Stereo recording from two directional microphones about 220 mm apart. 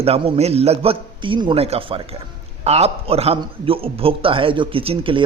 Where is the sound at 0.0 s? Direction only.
25° right (ahead or behind).